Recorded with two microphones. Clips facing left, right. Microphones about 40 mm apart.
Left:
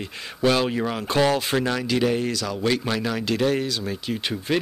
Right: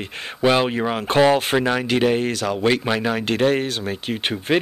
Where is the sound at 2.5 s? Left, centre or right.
Right.